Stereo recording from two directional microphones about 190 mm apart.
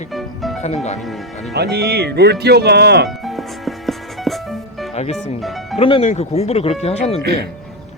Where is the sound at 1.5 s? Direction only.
60° right (ahead or behind).